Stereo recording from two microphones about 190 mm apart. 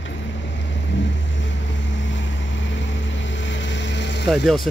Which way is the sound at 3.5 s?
70° left (ahead or behind).